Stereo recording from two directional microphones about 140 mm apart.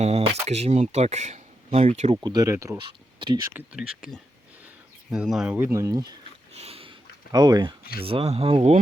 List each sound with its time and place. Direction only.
0.0 s speech: 50° right (ahead or behind)
2.2 s speech: 25° right (ahead or behind)
2.7 s a sound: 35° right (ahead or behind)
3.5 s speech: 5° right (ahead or behind); by 6.1 s 25° right (ahead or behind)
6.5 s sniff: 50° right (ahead or behind)
7.3 s speech: 30° right (ahead or behind)
8.0 s speech: 45° right (ahead or behind)